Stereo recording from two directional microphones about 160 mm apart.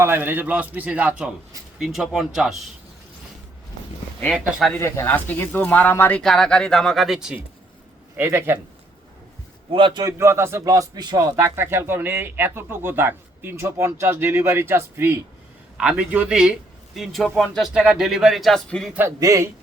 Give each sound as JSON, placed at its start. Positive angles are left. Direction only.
{"t": 0.0, "sound": "a man's voice", "side_deg": -15}
{"t": 4.2, "sound": "speech", "side_deg": 5}
{"t": 4.8, "sound": "speech", "side_deg": 15}
{"t": 8.1, "sound": "a man's voice", "side_deg": -15}
{"t": 9.6, "sound": "a man's voice", "side_deg": -35}
{"t": 18.9, "sound": "a man's voice", "side_deg": -20}